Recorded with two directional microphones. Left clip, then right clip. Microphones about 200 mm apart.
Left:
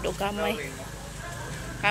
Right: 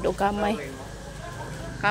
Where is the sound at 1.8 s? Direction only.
30° right (ahead or behind).